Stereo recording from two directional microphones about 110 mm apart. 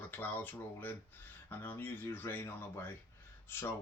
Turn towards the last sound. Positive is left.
turn(degrees=20)  # may be behind; listen again after turning